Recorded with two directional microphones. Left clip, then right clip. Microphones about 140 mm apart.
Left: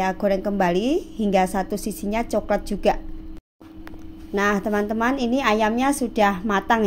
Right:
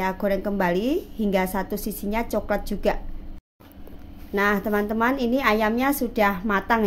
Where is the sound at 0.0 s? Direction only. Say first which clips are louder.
Left 3 dB; 15° left (ahead or behind).